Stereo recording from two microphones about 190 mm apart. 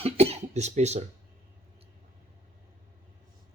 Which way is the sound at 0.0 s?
35° right (ahead or behind).